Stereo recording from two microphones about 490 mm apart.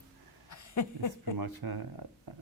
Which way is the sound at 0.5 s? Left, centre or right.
Left.